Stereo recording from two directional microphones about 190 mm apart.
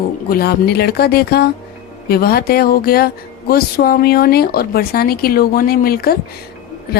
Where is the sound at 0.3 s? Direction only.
55° left (ahead or behind).